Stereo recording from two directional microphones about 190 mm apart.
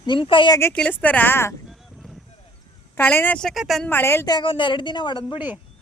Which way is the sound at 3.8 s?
10° left (ahead or behind).